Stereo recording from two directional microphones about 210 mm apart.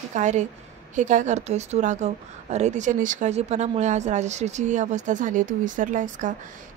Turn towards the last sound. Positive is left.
turn(degrees=-40)  # may be behind; listen again after turning